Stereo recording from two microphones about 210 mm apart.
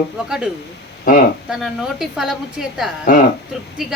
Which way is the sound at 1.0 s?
40° left (ahead or behind).